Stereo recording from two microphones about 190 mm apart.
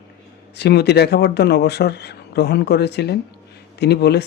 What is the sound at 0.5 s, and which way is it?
Speech, 60° left (ahead or behind).